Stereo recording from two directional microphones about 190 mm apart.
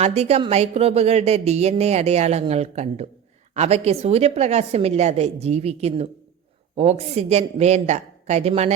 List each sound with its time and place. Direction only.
0.0 s a woman's voice: 35° right (ahead or behind)